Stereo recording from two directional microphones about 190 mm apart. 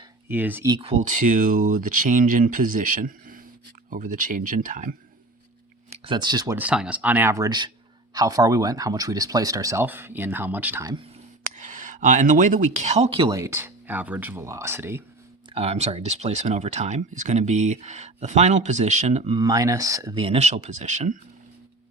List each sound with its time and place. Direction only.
0.3 s speech: 10° right (ahead or behind)
0.7 s speech: 30° right (ahead or behind); by 4.9 s 45° right (ahead or behind)
5.9 s speech: 25° right (ahead or behind)
6.6 s speech: 5° right (ahead or behind)
11.5 s speech: 40° right (ahead or behind)
13.2 s speech: 15° right (ahead or behind)
15.5 s speech: 35° right (ahead or behind)
19.4 s speech: 20° right (ahead or behind)
20.2 s speech: 35° right (ahead or behind)